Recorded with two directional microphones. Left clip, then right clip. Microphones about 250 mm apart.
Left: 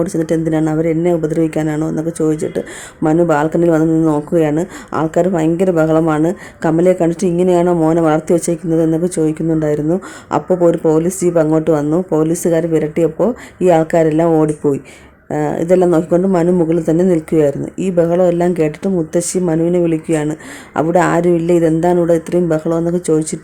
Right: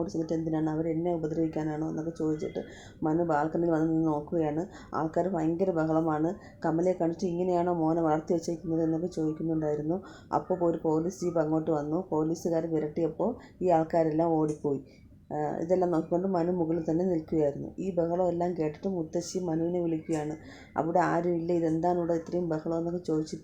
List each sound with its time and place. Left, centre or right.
0.3 s speech: left